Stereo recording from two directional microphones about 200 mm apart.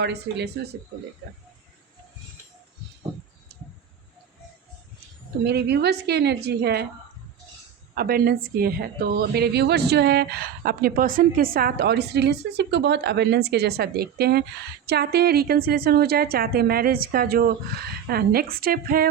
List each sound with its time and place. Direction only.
0.0 s a woman's voice: 55° right (ahead or behind)
5.4 s a woman's voice: 55° right (ahead or behind)
7.9 s a woman's voice: 50° right (ahead or behind)